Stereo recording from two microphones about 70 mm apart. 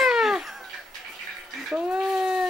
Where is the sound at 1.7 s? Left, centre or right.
Centre.